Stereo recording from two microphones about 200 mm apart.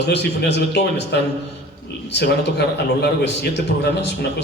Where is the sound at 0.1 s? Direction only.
60° left (ahead or behind).